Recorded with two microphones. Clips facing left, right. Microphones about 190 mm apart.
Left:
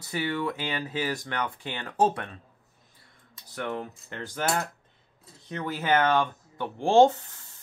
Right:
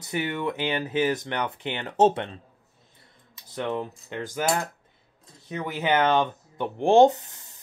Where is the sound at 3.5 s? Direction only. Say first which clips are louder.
Right 4 dB; 20° right (ahead or behind).